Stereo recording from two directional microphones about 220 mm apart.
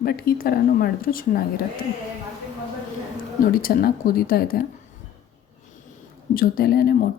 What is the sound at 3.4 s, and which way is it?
Speech, 40° left (ahead or behind).